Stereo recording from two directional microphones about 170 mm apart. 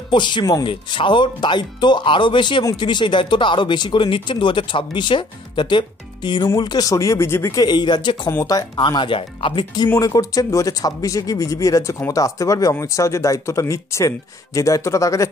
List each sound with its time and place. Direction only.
0.1 s speech: 25° left (ahead or behind)
8.3 s speech: 15° left (ahead or behind)